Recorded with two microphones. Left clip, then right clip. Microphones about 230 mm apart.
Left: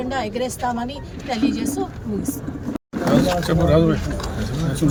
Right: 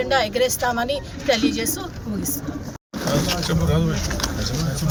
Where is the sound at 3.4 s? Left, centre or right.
Left.